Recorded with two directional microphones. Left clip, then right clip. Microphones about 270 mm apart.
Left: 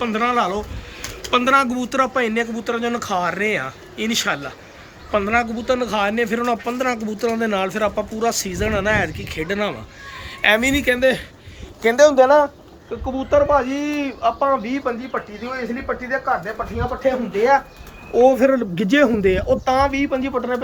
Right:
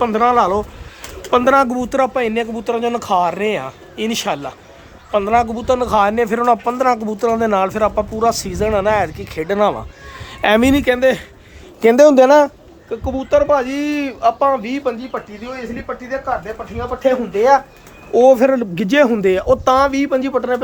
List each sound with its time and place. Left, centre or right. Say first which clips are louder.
0.0 s speech: right 6 dB; centre
10.4 s a woman's voice: right 3 dB; right
10.8 s speech: right 3 dB; centre
11.8 s speech: right 4 dB; right
12.9 s speech: right 3 dB; centre
17.0 s speech: right 5 dB; centre